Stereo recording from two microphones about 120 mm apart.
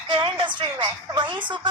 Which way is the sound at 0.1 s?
40° right (ahead or behind).